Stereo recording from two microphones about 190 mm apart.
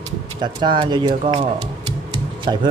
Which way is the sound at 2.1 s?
25° right (ahead or behind).